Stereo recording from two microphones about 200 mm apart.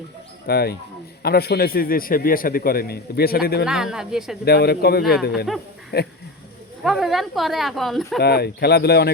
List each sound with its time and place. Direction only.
0.4 s a man's voice: 50° left (ahead or behind)
3.7 s speech: 5° right (ahead or behind)
4.4 s a man's voice: 55° left (ahead or behind)
6.8 s speech: centre (ahead or behind)
8.2 s a man's voice: 55° left (ahead or behind)